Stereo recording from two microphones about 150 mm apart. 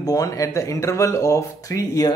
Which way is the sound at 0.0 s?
25° left (ahead or behind).